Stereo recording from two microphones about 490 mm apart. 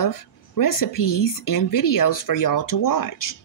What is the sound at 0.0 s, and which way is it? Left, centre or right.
Speech, left.